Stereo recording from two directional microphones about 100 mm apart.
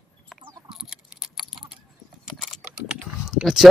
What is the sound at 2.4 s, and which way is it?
Typing, 5° right (ahead or behind).